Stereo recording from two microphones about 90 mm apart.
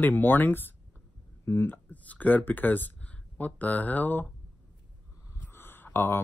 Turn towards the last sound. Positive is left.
turn(degrees=25)  # may be behind; listen again after turning